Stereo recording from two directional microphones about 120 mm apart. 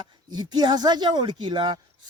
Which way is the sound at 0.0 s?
35° right (ahead or behind).